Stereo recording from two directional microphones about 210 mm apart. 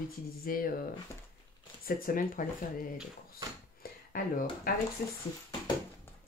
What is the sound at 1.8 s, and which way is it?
Speech, 45° left (ahead or behind).